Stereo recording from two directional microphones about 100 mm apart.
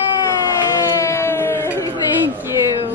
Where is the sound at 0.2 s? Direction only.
35° left (ahead or behind).